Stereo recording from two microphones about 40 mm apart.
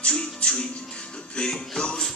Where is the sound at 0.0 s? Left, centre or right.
Left.